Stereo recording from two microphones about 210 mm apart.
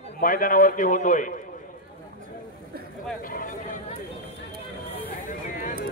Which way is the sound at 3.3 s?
40° left (ahead or behind).